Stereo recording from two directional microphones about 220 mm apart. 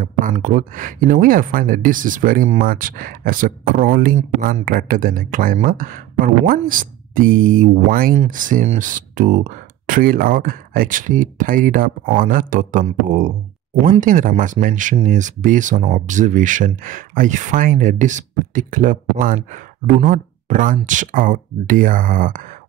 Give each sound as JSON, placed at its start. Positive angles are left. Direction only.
{"t": 0.0, "sound": "speech", "side_deg": -35}